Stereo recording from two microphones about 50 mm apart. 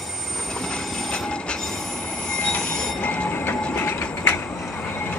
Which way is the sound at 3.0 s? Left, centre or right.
Left.